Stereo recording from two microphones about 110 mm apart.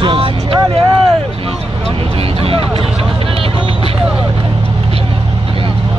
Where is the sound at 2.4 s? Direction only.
60° right (ahead or behind).